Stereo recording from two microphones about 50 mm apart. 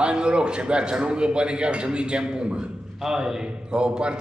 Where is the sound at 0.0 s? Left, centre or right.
Centre.